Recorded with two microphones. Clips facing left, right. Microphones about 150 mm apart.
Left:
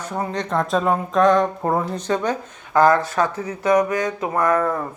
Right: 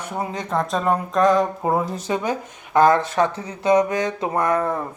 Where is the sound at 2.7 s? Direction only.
20° right (ahead or behind).